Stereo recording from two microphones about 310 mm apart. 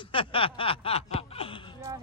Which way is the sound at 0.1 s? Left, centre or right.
Centre.